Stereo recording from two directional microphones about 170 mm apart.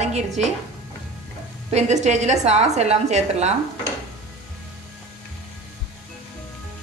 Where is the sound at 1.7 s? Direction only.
45° right (ahead or behind).